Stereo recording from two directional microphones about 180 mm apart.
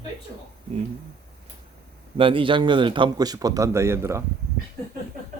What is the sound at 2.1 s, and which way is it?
A man's voice, 30° right (ahead or behind).